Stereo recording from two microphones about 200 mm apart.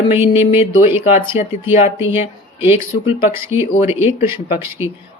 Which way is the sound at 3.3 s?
10° right (ahead or behind).